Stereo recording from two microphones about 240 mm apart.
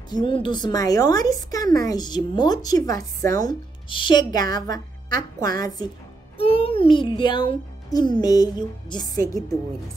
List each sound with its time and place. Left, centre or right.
0.1 s a child's voice: centre